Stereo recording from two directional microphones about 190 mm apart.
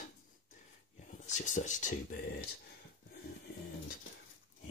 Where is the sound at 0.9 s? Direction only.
40° left (ahead or behind).